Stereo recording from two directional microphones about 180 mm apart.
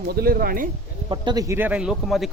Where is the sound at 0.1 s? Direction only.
55° right (ahead or behind).